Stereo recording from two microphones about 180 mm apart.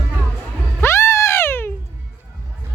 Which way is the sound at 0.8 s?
15° left (ahead or behind).